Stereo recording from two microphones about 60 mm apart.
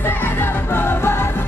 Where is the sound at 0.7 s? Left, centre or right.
Left.